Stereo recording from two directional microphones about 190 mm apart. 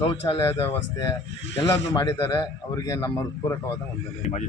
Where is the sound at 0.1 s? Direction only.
30° left (ahead or behind).